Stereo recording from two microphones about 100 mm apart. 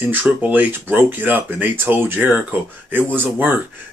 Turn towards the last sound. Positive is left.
turn(degrees=-20)  # may be behind; listen again after turning